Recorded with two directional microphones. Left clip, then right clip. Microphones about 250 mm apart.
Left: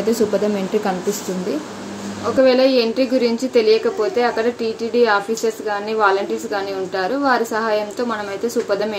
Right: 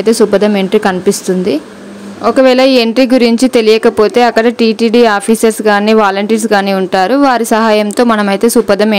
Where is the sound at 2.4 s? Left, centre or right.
Right.